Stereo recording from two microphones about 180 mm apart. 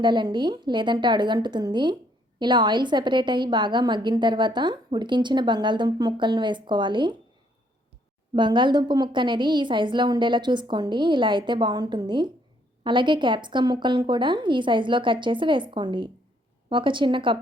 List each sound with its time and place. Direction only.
0.0 s a woman's voice: 25° right (ahead or behind)
8.3 s a woman's voice: 25° right (ahead or behind)